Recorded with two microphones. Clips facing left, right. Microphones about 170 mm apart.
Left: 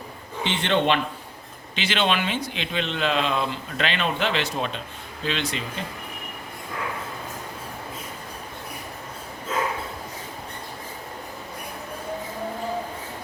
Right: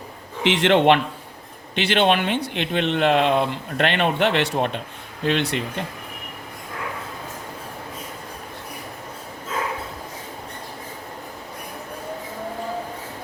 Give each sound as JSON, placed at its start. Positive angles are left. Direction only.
{"t": 0.4, "sound": "a man's voice", "side_deg": -90}
{"t": 1.7, "sound": "speech", "side_deg": -60}